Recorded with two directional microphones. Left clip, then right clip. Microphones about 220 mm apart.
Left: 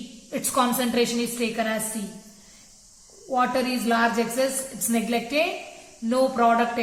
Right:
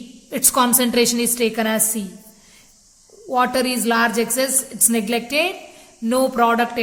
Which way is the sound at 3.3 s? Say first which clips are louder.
Right 5 dB; 50° right (ahead or behind).